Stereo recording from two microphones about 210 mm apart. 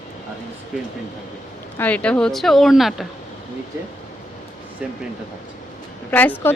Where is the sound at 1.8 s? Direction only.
5° left (ahead or behind).